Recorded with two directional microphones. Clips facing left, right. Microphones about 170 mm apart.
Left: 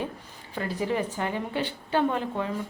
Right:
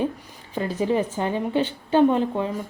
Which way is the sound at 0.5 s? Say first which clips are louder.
Right 5 dB; 20° right (ahead or behind).